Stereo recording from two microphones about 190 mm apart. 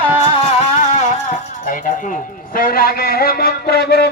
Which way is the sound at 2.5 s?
50° left (ahead or behind).